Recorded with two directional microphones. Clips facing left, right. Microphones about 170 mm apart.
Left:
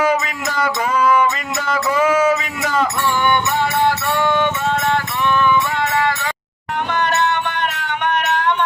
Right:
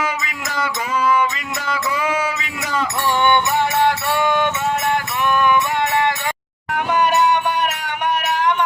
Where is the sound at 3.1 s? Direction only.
20° right (ahead or behind).